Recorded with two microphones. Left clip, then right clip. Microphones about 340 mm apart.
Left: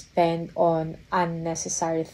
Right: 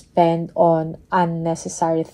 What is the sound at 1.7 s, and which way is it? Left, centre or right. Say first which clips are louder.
Speech: right 7 dB; centre.